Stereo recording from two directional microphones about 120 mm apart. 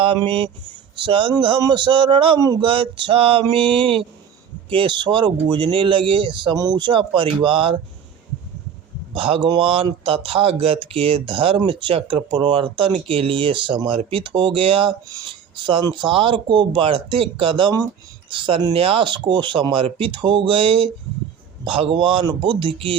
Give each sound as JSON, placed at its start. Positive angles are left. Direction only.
{"t": 0.3, "sound": "speech", "side_deg": -45}
{"t": 9.1, "sound": "speech", "side_deg": -50}